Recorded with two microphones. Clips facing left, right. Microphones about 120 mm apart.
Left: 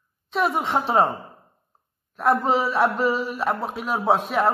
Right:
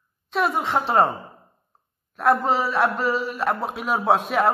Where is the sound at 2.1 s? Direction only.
Centre (ahead or behind).